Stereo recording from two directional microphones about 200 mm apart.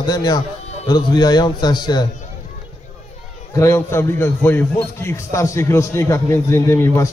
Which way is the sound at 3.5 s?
15° left (ahead or behind).